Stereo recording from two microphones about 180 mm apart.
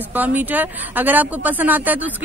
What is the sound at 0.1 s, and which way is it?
Speech, 10° right (ahead or behind).